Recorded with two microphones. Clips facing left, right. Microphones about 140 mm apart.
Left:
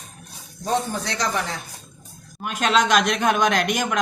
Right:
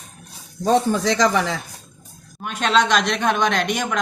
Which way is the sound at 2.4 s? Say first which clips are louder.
Right 1 dB; centre (ahead or behind).